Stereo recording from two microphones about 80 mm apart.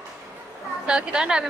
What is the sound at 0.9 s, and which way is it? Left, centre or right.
Speech, centre.